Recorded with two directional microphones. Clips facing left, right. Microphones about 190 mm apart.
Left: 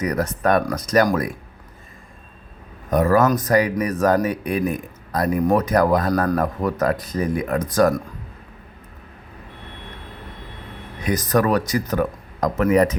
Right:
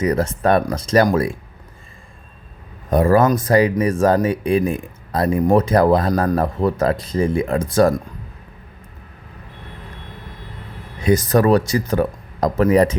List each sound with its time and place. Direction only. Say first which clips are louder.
0.0 s speech: right 3 dB; 25° right (ahead or behind)
2.9 s speech: right 2 dB; 30° right (ahead or behind)
11.0 s speech: right 4 dB; 30° right (ahead or behind)